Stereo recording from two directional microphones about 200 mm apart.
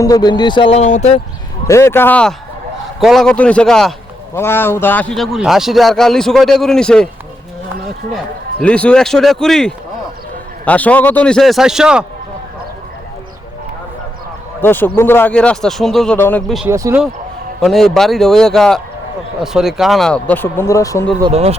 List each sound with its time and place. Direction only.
0.0 s speech: 20° left (ahead or behind); by 1.2 s 35° left (ahead or behind)
1.6 s a man's voice: 15° left (ahead or behind)
8.6 s a man's voice: 5° left (ahead or behind)
14.6 s speech: 10° left (ahead or behind)
16.6 s speech: 15° right (ahead or behind)
17.6 s a man's voice: centre (ahead or behind)
21.0 s speech: 20° right (ahead or behind)